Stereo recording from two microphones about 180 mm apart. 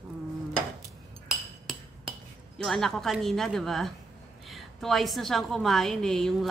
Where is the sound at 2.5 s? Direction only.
Centre (ahead or behind).